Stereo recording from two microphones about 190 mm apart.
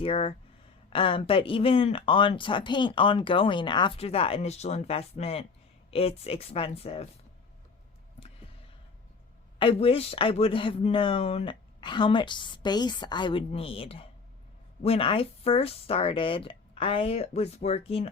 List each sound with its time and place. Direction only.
0.0 s speech: 30° left (ahead or behind)
9.6 s speech: 30° left (ahead or behind)